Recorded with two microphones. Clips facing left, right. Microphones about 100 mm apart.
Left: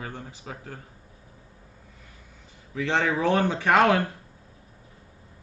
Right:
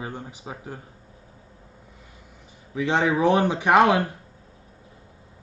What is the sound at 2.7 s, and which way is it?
Speech, 15° right (ahead or behind).